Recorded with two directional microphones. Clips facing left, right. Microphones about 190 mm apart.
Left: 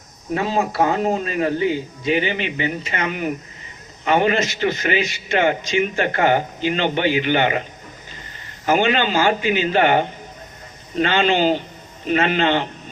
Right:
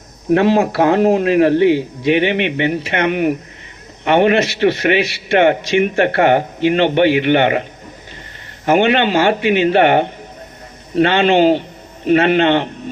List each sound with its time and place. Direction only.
0.3 s a man's voice: 75° right (ahead or behind)
8.6 s a man's voice: 65° right (ahead or behind)